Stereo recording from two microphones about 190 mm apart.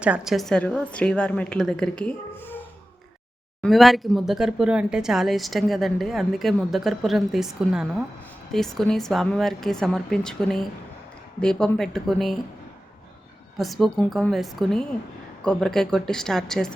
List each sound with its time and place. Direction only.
0.0 s speech: 5° right (ahead or behind)
3.6 s speech: centre (ahead or behind)
13.6 s speech: centre (ahead or behind)